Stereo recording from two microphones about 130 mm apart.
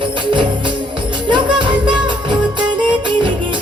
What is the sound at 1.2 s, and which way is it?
Music, 40° right (ahead or behind).